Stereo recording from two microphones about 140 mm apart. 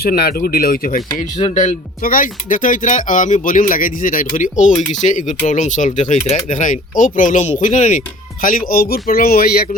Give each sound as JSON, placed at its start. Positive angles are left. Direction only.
{"t": 0.0, "sound": "speech", "side_deg": 90}
{"t": 1.5, "sound": "speech", "side_deg": 75}